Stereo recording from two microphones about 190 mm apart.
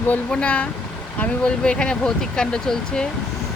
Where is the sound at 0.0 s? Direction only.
10° left (ahead or behind).